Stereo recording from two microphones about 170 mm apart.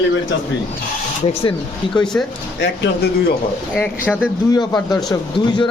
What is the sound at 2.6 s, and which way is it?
Speech, 90° left.